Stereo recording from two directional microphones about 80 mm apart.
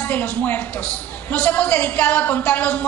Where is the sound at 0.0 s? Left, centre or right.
Centre.